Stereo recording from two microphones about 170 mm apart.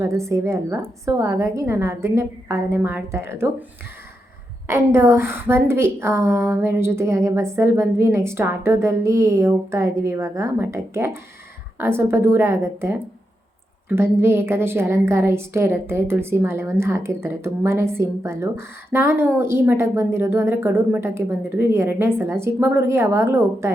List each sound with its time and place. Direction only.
0.0 s a woman's voice: 15° right (ahead or behind)
4.7 s a woman's voice: 15° right (ahead or behind)